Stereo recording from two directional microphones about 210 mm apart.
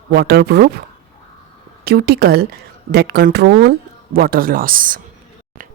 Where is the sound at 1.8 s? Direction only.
50° right (ahead or behind).